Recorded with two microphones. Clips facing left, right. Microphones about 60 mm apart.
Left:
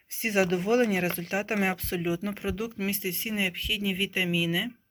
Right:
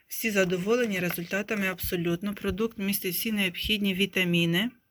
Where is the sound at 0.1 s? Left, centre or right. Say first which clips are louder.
Even; left.